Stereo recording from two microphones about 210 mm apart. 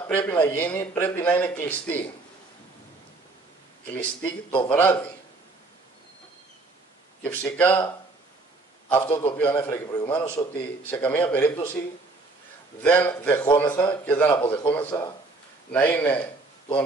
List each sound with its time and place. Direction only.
0.0 s a man's voice: 10° left (ahead or behind)
3.9 s a man's voice: 10° left (ahead or behind)
7.2 s a man's voice: 10° left (ahead or behind)
8.8 s a man's voice: 10° left (ahead or behind)
12.8 s a man's voice: 5° left (ahead or behind)
14.3 s a man's voice: 20° left (ahead or behind)
14.7 s a man's voice: 10° left (ahead or behind)